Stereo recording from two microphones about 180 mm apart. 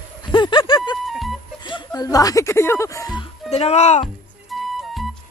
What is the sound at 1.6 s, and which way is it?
Speech, 25° left (ahead or behind).